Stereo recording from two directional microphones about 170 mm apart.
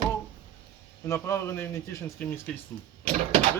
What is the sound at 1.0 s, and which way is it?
Speech, 15° left (ahead or behind).